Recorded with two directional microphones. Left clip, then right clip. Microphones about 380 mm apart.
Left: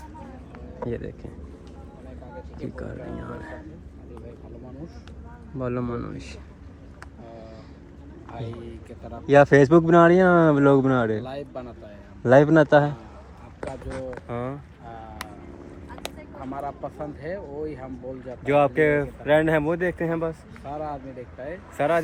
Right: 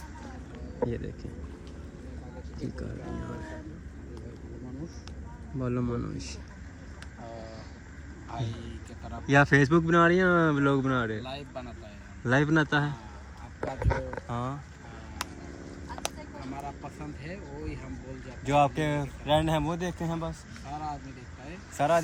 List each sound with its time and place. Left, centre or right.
0.9 s speech: centre
2.7 s speech: centre
5.5 s speech: centre
9.2 s speech: centre
14.3 s speech: centre
15.2 s vehicle: centre
16.0 s a sound: centre
17.2 s speech: left
18.4 s speech: centre
21.8 s speech: centre